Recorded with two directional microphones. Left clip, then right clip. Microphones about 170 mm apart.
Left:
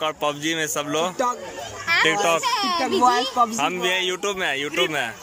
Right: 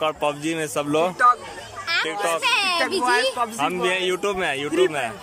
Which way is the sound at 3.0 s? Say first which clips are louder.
Left 6 dB; 25° left (ahead or behind).